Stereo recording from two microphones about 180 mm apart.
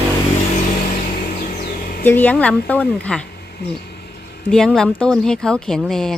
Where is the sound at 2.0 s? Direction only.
10° left (ahead or behind).